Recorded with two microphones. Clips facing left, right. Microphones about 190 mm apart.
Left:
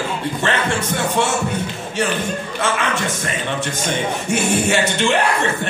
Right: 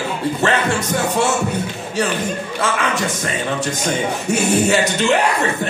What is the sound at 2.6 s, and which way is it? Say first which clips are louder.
Speech: right 1 dB; 40° right (ahead or behind).